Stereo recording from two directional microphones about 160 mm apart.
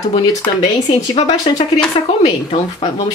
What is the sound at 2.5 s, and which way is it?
Speech, 40° left (ahead or behind).